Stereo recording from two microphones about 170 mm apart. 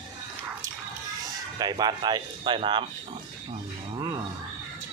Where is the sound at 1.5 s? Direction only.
25° right (ahead or behind).